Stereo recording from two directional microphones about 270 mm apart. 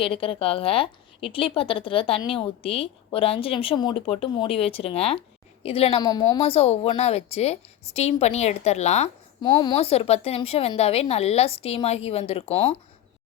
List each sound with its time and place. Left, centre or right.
0.0 s a woman's voice: left